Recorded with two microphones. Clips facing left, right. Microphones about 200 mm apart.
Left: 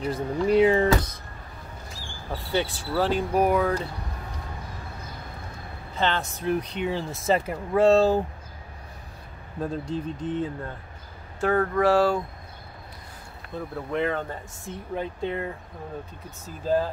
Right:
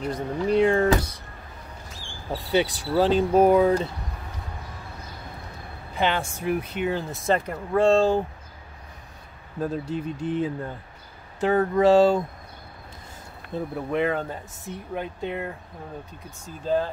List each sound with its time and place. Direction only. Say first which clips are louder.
0.0 s speech: left 1 dB; 5° left (ahead or behind)
2.3 s speech: right 4 dB; 15° right (ahead or behind)
5.9 s speech: right 2 dB; 15° right (ahead or behind); by 8.2 s 5° left (ahead or behind)
9.6 s speech: right 1 dB; 5° right (ahead or behind)
11.3 s speech: right 2 dB; 20° right (ahead or behind)
13.7 s speech: right 2 dB; 15° right (ahead or behind); by 16.9 s 5° left (ahead or behind)